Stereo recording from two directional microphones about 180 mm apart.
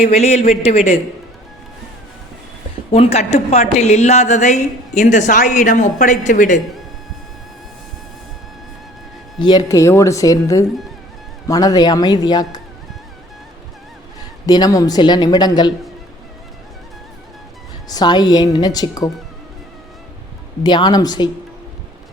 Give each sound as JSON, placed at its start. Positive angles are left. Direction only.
{"t": 0.0, "sound": "a woman's voice", "side_deg": 35}
{"t": 2.9, "sound": "a woman's voice", "side_deg": 35}
{"t": 9.4, "sound": "a woman's voice", "side_deg": 25}
{"t": 14.4, "sound": "a woman's voice", "side_deg": 20}
{"t": 17.8, "sound": "a woman's voice", "side_deg": 20}
{"t": 20.7, "sound": "a woman's voice", "side_deg": 25}